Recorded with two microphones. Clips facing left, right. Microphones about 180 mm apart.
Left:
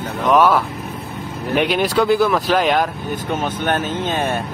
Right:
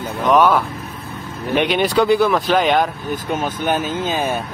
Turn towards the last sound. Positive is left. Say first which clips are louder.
# even
turn(degrees=-5)  # may be behind; listen again after turning